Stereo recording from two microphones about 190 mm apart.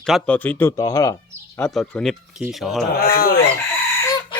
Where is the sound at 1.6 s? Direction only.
5° left (ahead or behind).